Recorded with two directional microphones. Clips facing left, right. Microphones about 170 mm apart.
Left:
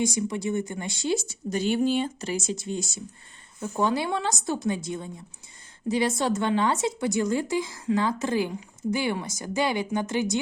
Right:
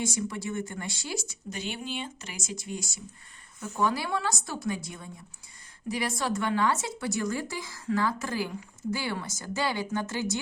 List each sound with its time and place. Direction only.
0.0 s speech: 20° left (ahead or behind)
1.5 s speech: 40° left (ahead or behind); by 10.4 s 20° left (ahead or behind)